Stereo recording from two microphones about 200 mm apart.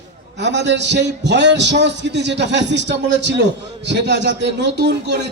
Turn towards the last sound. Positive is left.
turn(degrees=-60)  # may be behind; listen again after turning